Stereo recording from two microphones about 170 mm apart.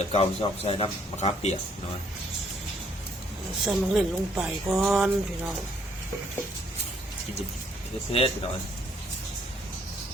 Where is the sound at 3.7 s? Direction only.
5° right (ahead or behind).